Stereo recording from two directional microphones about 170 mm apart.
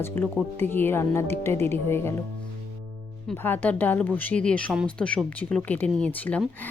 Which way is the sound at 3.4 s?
10° left (ahead or behind).